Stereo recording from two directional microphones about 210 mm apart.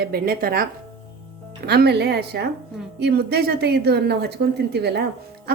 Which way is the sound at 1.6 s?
50° right (ahead or behind).